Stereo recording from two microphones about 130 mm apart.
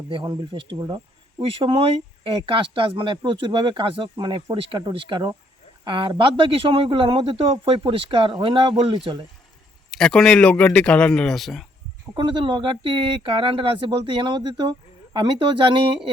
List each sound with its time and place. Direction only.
0.1 s speech: 40° right (ahead or behind)
9.9 s a man's voice: 5° left (ahead or behind)
12.1 s speech: 35° right (ahead or behind)